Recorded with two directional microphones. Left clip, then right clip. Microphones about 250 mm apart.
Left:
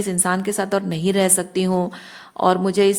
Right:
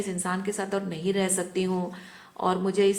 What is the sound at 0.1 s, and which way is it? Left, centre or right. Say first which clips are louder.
A woman's voice: left 8 dB; left.